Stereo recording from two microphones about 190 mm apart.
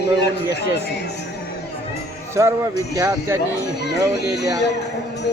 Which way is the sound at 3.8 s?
60° left (ahead or behind).